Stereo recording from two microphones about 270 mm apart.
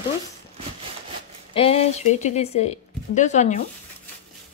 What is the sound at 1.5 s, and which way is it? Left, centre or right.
Speech, left.